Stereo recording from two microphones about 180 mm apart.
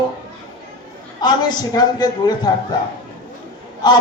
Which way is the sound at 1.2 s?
25° left (ahead or behind).